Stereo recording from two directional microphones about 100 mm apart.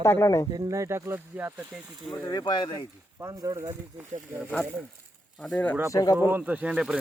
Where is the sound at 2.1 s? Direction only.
40° left (ahead or behind).